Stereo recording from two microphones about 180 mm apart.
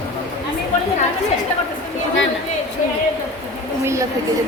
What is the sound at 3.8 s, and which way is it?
Speech, 15° right (ahead or behind).